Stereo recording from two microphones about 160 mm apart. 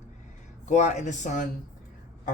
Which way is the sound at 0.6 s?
45° left (ahead or behind).